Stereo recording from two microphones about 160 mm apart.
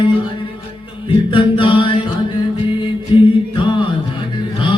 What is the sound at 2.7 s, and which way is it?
Mantra, 30° left (ahead or behind).